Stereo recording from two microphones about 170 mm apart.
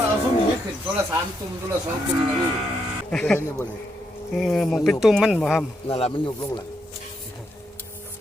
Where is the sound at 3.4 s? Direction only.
15° left (ahead or behind).